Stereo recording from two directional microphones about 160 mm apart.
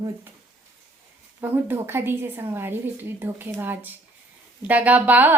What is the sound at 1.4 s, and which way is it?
A woman's voice, 15° right (ahead or behind).